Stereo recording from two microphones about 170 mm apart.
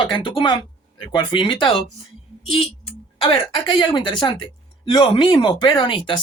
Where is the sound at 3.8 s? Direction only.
25° left (ahead or behind).